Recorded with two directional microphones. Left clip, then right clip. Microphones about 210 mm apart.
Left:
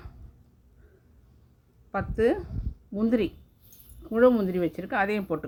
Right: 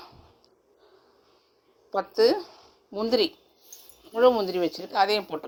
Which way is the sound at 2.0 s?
90° right.